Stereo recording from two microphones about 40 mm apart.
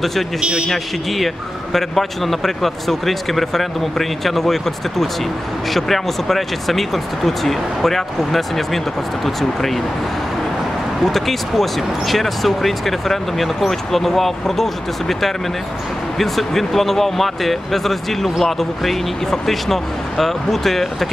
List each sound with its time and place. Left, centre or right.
0.4 s speech: right
0.7 s a man's voice: centre
11.1 s a man's voice: centre